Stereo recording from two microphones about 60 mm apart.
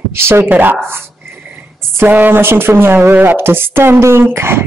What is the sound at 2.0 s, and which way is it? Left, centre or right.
A woman's voice, right.